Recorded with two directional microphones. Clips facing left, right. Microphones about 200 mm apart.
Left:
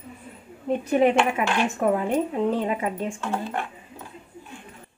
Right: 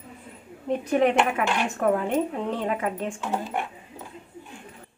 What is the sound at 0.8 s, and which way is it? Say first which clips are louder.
Speech: left 1 dB; 5° left (ahead or behind).